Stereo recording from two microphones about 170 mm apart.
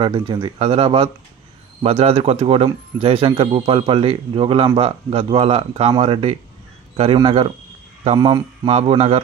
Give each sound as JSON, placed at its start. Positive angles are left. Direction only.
{"t": 0.0, "sound": "speech", "side_deg": -30}
{"t": 8.6, "sound": "speech", "side_deg": -35}